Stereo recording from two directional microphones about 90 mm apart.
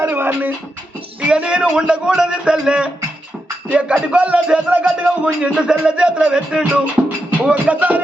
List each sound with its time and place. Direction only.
0.0 s music: 25° right (ahead or behind)
1.3 s speech: 10° right (ahead or behind)